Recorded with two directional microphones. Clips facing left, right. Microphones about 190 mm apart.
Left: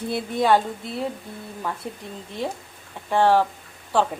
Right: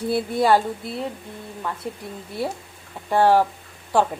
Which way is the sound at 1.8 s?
Centre (ahead or behind).